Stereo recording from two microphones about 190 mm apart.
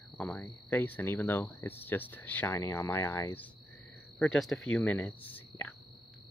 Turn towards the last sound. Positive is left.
turn(degrees=10)  # may be behind; listen again after turning